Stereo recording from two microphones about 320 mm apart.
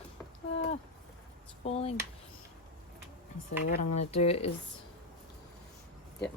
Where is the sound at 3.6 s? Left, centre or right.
Left.